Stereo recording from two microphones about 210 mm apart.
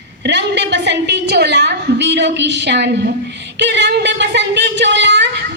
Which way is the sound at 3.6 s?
55° right (ahead or behind).